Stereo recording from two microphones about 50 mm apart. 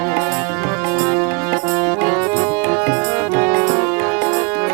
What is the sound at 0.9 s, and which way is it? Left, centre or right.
Music, right.